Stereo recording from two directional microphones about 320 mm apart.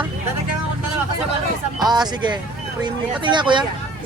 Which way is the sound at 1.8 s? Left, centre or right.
Centre.